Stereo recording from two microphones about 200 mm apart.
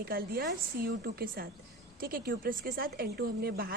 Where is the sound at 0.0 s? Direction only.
50° right (ahead or behind).